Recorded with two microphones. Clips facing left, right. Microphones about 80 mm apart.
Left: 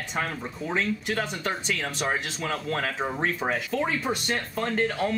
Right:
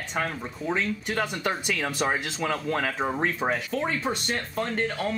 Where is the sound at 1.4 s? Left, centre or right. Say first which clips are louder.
Right 2 dB; centre.